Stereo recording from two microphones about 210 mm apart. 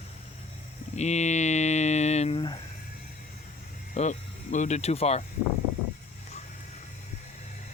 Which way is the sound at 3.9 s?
35° left (ahead or behind).